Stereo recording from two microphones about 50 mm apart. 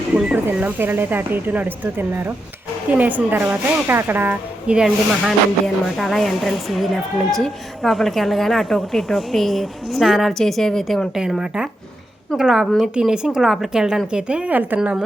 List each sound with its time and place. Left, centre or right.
0.3 s speech: right
2.9 s speech: right
3.3 s speech: right
4.6 s a woman's voice: centre
5.6 s speech: centre
11.3 s a woman's voice: centre
14.7 s speech: right